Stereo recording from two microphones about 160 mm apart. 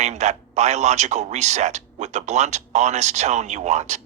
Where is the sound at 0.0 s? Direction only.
45° right (ahead or behind).